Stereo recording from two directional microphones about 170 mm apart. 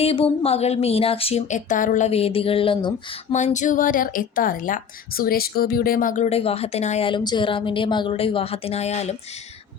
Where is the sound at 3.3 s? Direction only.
45° left (ahead or behind).